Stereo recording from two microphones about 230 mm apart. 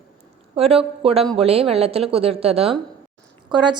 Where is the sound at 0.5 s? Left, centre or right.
Right.